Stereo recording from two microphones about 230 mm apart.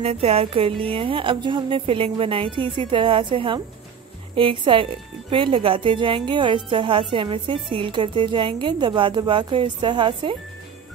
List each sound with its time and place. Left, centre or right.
0.0 s a woman's voice: right